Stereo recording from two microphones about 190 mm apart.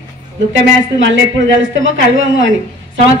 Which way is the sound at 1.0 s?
80° right.